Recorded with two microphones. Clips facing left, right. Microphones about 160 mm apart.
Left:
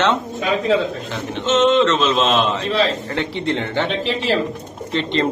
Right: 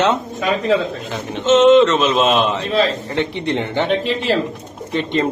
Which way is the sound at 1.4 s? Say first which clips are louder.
Right 5 dB; 5° right (ahead or behind).